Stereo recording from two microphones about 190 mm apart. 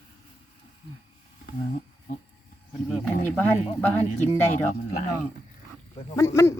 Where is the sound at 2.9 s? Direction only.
5° left (ahead or behind).